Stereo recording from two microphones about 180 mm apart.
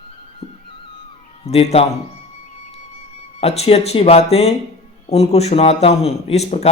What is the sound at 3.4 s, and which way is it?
Speech, 35° left (ahead or behind).